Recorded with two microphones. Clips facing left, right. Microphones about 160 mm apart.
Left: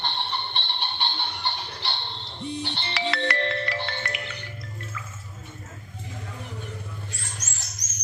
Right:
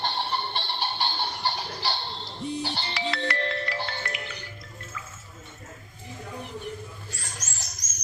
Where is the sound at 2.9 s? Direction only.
75° left (ahead or behind); by 3.7 s 90° left.